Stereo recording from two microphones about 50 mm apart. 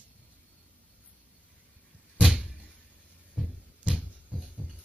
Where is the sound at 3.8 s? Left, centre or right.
Centre.